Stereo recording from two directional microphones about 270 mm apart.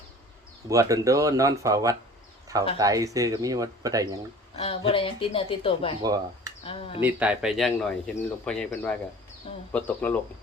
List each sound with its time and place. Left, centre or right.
0.7 s speech: centre
4.5 s speech: left
6.0 s speech: centre
6.7 s speech: centre
7.0 s speech: centre